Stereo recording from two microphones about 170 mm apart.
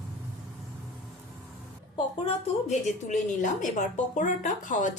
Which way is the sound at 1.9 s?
40° left (ahead or behind).